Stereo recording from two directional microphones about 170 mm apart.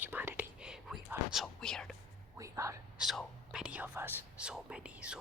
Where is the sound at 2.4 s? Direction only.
20° right (ahead or behind).